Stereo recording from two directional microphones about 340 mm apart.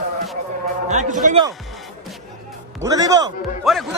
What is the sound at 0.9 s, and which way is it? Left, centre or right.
Speech, right.